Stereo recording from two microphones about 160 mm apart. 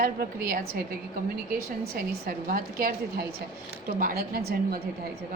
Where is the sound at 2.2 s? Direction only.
65° right (ahead or behind).